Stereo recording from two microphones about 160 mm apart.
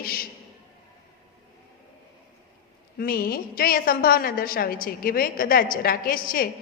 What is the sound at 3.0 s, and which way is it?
A woman's voice, 65° left (ahead or behind).